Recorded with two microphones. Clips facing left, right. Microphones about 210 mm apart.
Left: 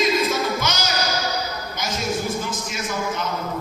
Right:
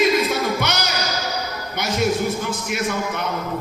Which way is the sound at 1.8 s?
60° right (ahead or behind).